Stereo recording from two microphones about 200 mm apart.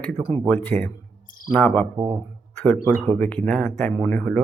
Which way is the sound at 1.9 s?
20° right (ahead or behind).